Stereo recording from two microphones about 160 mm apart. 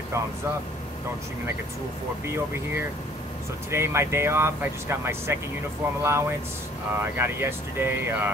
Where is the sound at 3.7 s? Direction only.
15° right (ahead or behind).